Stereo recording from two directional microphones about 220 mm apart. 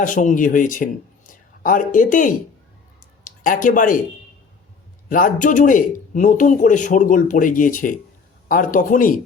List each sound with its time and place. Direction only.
0.0 s speech: 35° left (ahead or behind)
5.0 s speech: 35° left (ahead or behind)